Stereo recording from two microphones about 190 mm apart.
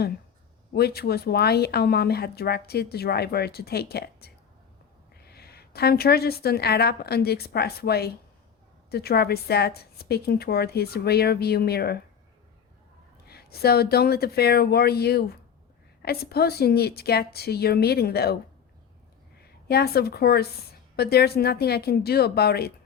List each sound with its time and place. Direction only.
0.7 s a woman's voice: 55° left (ahead or behind)
13.2 s speech: 55° left (ahead or behind)
19.4 s a woman's voice: 55° left (ahead or behind)